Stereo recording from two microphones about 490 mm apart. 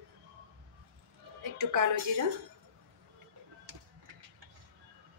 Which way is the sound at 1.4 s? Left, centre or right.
Right.